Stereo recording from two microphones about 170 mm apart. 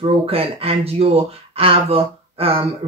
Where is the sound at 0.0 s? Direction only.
35° right (ahead or behind).